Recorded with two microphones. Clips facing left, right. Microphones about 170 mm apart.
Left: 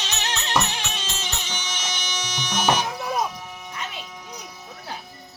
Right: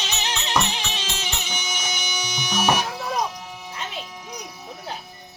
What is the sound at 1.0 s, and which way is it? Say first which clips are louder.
Music: right 1 dB; 10° right (ahead or behind).